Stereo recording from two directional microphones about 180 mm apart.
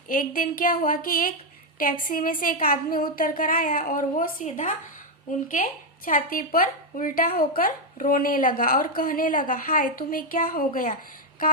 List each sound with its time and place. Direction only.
0.1 s a woman's voice: 50° left (ahead or behind)
6.1 s a woman's voice: 50° left (ahead or behind)